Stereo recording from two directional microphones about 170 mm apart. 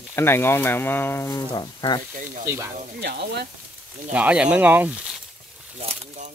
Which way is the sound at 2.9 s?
75° right (ahead or behind).